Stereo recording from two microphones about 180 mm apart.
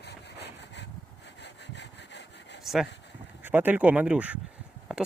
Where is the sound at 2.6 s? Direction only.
Centre (ahead or behind).